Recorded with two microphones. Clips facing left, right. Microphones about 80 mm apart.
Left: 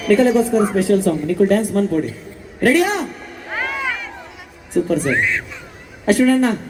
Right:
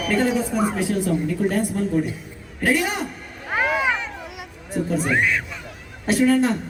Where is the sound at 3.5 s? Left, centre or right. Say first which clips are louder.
Right 3 dB; centre.